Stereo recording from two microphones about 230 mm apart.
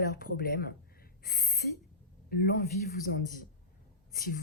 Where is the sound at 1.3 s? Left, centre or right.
Left.